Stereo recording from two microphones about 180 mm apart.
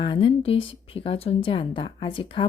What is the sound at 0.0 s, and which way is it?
A woman's voice, 25° left (ahead or behind).